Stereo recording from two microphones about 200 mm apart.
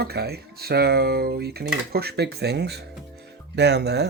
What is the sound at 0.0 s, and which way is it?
Speech, 50° right (ahead or behind).